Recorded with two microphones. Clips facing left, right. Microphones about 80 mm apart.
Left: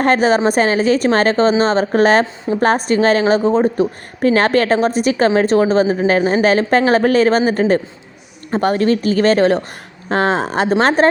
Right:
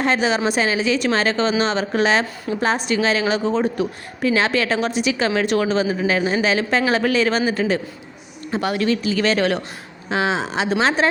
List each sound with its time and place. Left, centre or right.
0.0 s a woman's voice: left
10.1 s a woman's voice: left